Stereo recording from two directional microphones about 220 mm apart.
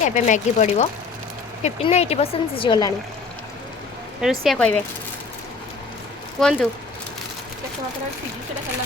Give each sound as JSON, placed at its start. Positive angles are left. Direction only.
{"t": 0.0, "sound": "speech", "side_deg": 35}
{"t": 4.2, "sound": "speech", "side_deg": 0}
{"t": 6.4, "sound": "speech", "side_deg": 0}